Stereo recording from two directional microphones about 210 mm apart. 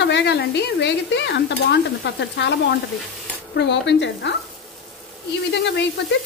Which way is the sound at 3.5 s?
55° left (ahead or behind).